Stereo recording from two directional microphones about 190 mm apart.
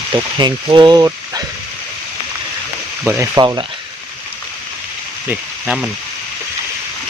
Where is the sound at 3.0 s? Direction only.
15° right (ahead or behind).